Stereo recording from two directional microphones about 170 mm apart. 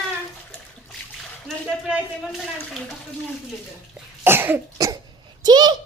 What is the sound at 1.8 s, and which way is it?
Speech, 5° right (ahead or behind).